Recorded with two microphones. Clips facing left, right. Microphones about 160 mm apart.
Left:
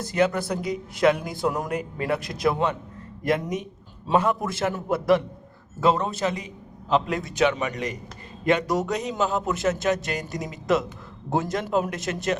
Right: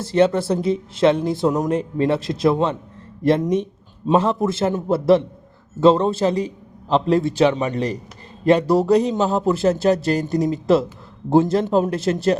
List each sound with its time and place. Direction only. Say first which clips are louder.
0.0 s a man's voice: right 6 dB; 30° right (ahead or behind)